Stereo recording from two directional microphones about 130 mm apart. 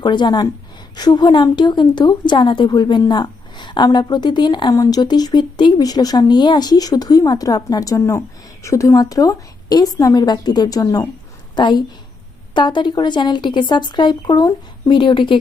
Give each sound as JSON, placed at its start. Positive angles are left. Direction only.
{"t": 0.0, "sound": "a woman's voice", "side_deg": 35}